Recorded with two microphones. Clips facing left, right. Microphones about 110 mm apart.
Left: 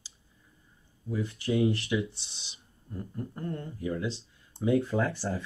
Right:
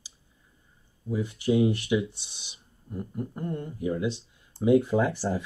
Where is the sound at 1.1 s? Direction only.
20° right (ahead or behind).